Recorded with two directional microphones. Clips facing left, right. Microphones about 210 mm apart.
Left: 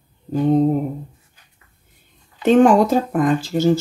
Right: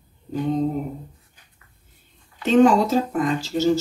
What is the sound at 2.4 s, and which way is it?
Speech, 50° left (ahead or behind).